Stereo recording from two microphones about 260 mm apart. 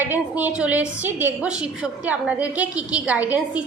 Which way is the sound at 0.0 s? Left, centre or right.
Centre.